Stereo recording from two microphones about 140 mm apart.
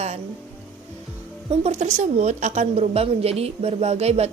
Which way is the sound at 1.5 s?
55° right (ahead or behind).